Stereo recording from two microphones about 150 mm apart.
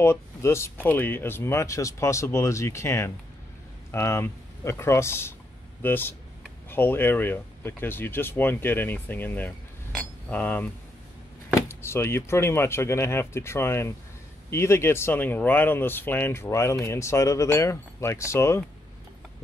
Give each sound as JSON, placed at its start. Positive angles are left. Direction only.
{"t": 0.0, "sound": "speech", "side_deg": 15}
{"t": 9.9, "sound": "a sound", "side_deg": 10}
{"t": 11.8, "sound": "speech", "side_deg": 15}